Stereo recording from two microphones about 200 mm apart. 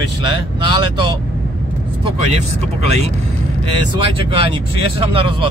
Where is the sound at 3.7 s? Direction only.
25° right (ahead or behind).